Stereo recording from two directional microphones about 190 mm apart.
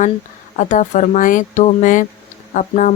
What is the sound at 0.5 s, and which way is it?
Speech, 40° left (ahead or behind).